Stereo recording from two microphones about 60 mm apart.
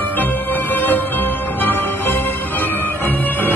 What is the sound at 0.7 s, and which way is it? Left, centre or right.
Music, left.